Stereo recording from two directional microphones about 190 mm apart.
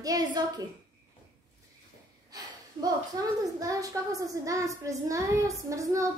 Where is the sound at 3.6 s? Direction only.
20° right (ahead or behind).